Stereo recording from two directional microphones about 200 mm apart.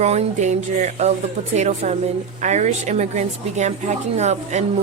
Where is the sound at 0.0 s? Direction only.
35° right (ahead or behind).